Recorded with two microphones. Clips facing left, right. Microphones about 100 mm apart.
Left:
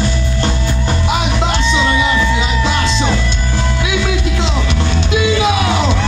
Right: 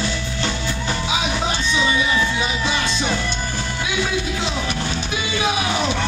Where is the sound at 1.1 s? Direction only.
70° left (ahead or behind); by 5.9 s 90° left.